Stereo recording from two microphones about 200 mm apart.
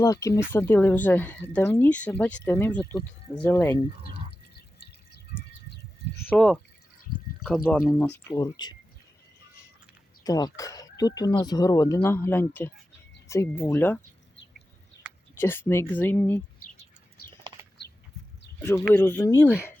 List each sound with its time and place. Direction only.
0.0 s speech: 15° left (ahead or behind)
6.2 s speech: centre (ahead or behind)
8.3 s speech: 20° left (ahead or behind)
10.2 s speech: 20° left (ahead or behind)
15.1 s a sound: 5° right (ahead or behind)
15.4 s speech: 10° left (ahead or behind)
18.6 s speech: 10° left (ahead or behind)